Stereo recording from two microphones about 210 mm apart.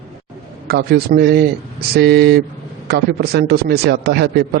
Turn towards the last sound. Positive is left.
turn(degrees=-50)  # may be behind; listen again after turning